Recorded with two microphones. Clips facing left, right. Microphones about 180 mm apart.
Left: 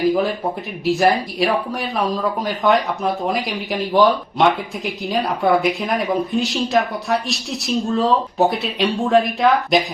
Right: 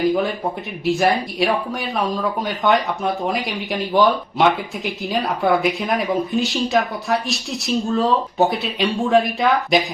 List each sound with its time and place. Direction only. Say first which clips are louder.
0.9 s speech: left 1 dB; centre (ahead or behind)